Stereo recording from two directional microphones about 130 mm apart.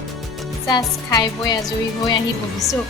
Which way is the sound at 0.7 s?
35° left (ahead or behind).